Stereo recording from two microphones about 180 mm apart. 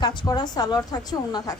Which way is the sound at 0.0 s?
25° left (ahead or behind).